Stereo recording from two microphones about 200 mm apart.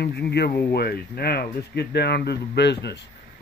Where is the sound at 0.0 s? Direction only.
55° left (ahead or behind).